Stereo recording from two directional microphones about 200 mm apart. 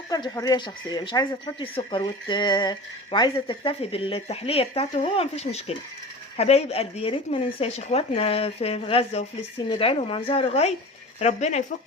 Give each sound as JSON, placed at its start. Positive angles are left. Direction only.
{"t": 0.1, "sound": "speech", "side_deg": 20}